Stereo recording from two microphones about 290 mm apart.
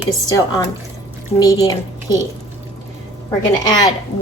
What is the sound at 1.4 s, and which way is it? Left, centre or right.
Speech, centre.